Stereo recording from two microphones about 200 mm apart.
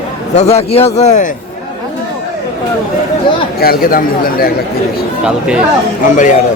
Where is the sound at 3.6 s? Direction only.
50° left (ahead or behind).